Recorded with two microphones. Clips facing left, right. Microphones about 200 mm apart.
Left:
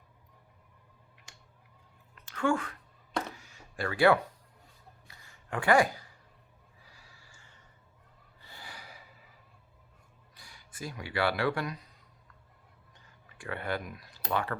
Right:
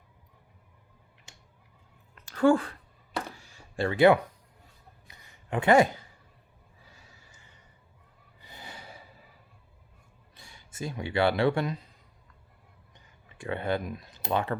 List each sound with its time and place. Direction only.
2.2 s speech: 35° right (ahead or behind)
3.3 s a sound: 30° right (ahead or behind)
8.4 s gasp: 20° right (ahead or behind)
10.3 s speech: 25° right (ahead or behind)
13.2 s speech: 25° right (ahead or behind)